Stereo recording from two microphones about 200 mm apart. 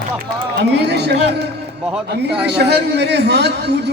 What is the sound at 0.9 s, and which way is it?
Speech, 55° right (ahead or behind).